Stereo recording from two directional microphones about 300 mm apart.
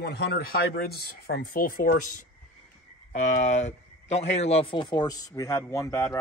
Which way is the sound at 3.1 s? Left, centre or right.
Left.